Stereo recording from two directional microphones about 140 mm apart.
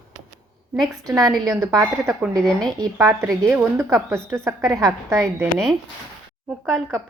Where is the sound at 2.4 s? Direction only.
5° left (ahead or behind).